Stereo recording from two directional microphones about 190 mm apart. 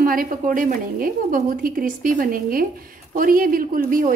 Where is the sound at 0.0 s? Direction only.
45° right (ahead or behind).